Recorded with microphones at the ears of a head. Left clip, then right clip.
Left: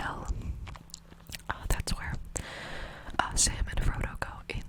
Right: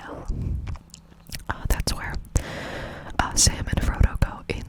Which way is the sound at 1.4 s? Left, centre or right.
Right.